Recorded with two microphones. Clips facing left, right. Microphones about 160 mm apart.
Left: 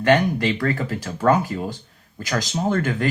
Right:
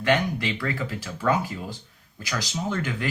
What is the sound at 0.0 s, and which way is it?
Speech, 45° left (ahead or behind).